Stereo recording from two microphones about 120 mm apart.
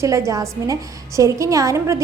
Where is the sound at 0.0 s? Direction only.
25° right (ahead or behind).